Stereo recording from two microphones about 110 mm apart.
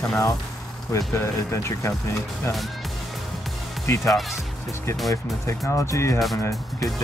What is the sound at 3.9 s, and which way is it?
Speech, 25° left (ahead or behind).